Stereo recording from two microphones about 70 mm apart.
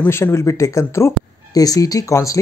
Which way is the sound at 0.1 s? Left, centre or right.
Left.